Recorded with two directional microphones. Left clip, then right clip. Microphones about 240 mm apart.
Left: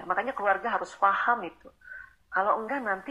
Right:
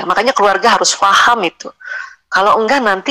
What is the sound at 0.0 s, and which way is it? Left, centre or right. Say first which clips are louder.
Speech: right 16 dB; right.